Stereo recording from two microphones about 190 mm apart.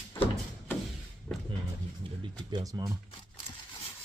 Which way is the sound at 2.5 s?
20° right (ahead or behind).